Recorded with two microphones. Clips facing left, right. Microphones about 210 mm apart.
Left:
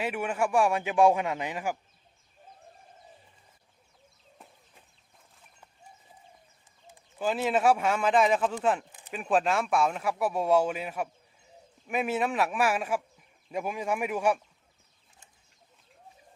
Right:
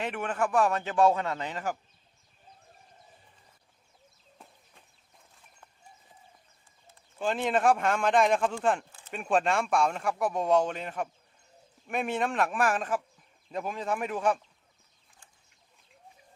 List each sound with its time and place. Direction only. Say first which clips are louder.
0.0 s a man's voice: left 1 dB; 10° left (ahead or behind)
6.9 s speech: left 1 dB; 5° left (ahead or behind)
8.9 s a sound: left 2 dB; 15° left (ahead or behind)
9.1 s a man's voice: left 1 dB; centre (ahead or behind)